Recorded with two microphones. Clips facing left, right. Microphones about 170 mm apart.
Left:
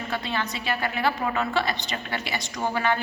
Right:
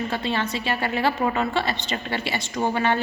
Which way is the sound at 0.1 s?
25° right (ahead or behind).